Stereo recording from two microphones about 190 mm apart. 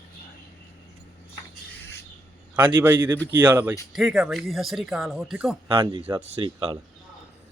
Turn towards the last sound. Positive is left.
turn(degrees=-25)  # may be behind; listen again after turning